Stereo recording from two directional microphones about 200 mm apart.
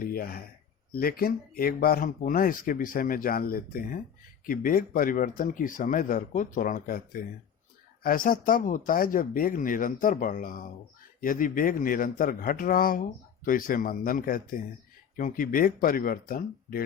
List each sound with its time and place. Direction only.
0.0 s speech: 50° left (ahead or behind)